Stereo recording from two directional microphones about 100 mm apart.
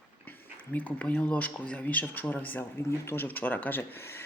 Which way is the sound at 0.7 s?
15° left (ahead or behind).